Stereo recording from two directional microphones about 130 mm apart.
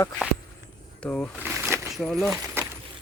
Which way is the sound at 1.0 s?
10° left (ahead or behind).